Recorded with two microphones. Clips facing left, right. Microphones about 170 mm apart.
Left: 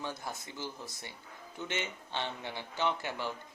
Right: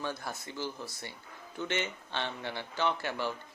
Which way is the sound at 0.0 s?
20° left (ahead or behind).